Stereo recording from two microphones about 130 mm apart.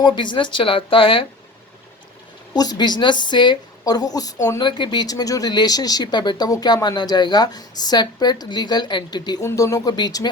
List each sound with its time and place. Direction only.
0.0 s speech: 35° left (ahead or behind)
2.5 s speech: 30° left (ahead or behind)